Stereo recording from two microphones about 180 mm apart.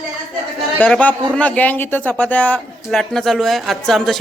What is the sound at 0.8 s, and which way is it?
A woman's voice, 10° left (ahead or behind).